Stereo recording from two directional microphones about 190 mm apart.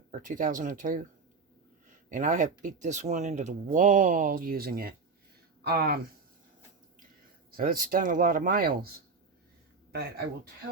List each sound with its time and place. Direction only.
0.3 s speech: 45° right (ahead or behind)
2.0 s speech: 45° right (ahead or behind)
7.5 s speech: 50° right (ahead or behind)
9.9 s speech: 55° right (ahead or behind)